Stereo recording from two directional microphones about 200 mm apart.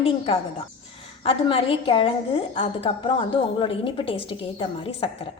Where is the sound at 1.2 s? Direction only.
25° left (ahead or behind).